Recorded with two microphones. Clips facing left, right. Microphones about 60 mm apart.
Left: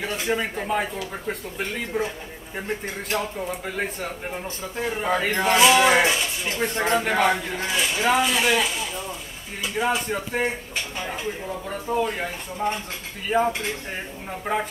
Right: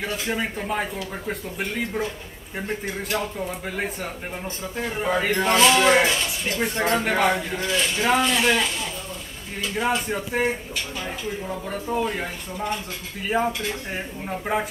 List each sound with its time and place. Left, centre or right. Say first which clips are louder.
0.0 s speech: left 1 dB; centre
3.2 s speech: even; centre
7.7 s speech: even; centre
9.8 s speech: right 1 dB; centre
13.3 s speech: left 2 dB; centre